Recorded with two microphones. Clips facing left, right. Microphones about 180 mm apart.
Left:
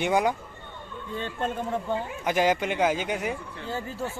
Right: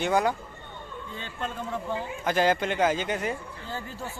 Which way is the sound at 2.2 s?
15° left (ahead or behind).